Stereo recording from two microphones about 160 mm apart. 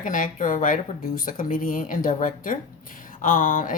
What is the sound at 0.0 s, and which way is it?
A woman's voice, 55° left (ahead or behind).